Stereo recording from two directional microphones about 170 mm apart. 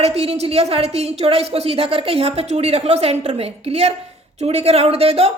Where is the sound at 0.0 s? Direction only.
35° right (ahead or behind).